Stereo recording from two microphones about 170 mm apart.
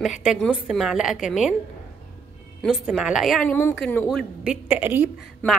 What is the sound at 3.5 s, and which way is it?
Speech, 10° left (ahead or behind).